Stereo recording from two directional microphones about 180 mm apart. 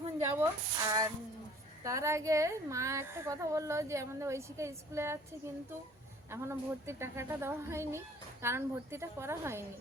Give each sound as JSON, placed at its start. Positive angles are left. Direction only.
{"t": 0.2, "sound": "a sound", "side_deg": -15}
{"t": 0.9, "sound": "speech", "side_deg": -20}
{"t": 6.3, "sound": "speech", "side_deg": -15}